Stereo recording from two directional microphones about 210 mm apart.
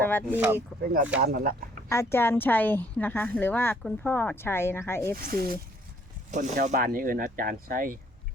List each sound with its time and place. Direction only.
0.0 s speech: 10° left (ahead or behind)
0.3 s speech: 10° right (ahead or behind)
1.2 s speech: 45° right (ahead or behind)
1.9 s a woman's voice: 10° left (ahead or behind)
5.1 s speech: 45° right (ahead or behind)